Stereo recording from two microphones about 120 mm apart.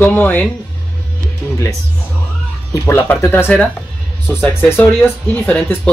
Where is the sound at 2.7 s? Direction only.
20° left (ahead or behind).